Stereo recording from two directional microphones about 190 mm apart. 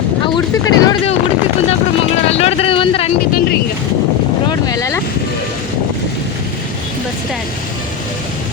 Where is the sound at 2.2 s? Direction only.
35° left (ahead or behind).